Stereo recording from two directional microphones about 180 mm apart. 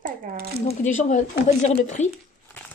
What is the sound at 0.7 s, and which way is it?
Speech, 45° left (ahead or behind).